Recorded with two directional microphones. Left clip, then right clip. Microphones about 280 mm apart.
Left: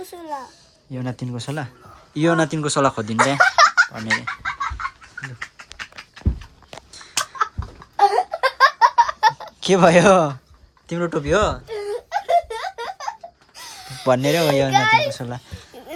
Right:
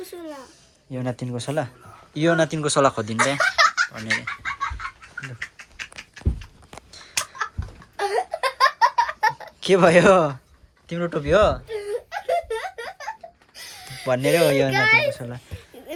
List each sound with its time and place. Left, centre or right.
0.3 s speech: centre
3.4 s giggle: left
3.8 s speech: centre
5.4 s a sound: left
7.9 s laughter: left
9.2 s a sound: centre
10.8 s speech: centre
11.9 s laughter: left
13.6 s a sound: left
14.0 s a child's voice: centre